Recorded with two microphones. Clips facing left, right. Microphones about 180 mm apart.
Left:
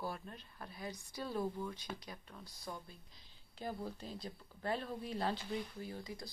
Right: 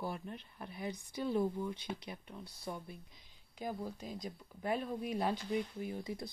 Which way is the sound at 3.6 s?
15° right (ahead or behind).